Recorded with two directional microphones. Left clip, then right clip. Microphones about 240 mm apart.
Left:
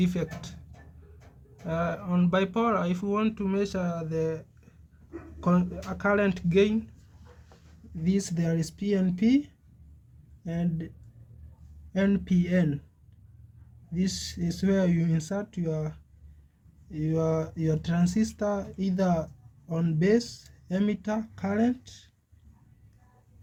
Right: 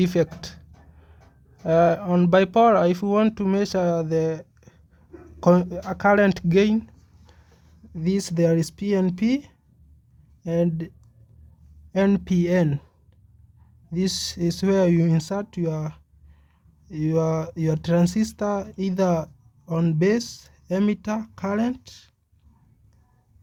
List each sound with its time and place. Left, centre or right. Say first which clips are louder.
0.0 s speech: right 9 dB; right
1.6 s speech: right 12 dB; right
8.0 s speech: right 9 dB; right
13.9 s speech: right 7 dB; right